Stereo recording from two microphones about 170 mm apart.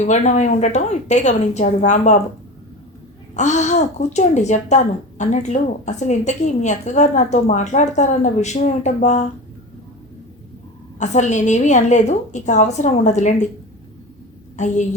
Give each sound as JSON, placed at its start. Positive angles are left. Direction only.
{"t": 0.0, "sound": "speech", "side_deg": 45}
{"t": 3.3, "sound": "speech", "side_deg": 45}
{"t": 11.0, "sound": "speech", "side_deg": 45}
{"t": 14.5, "sound": "a woman's voice", "side_deg": 45}